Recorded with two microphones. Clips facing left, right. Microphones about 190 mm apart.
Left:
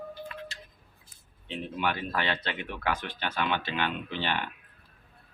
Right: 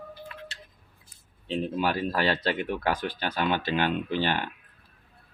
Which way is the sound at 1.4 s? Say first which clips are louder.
Right 4 dB; 35° right (ahead or behind).